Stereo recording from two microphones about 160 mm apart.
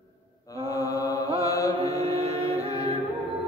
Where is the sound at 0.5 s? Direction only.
20° left (ahead or behind).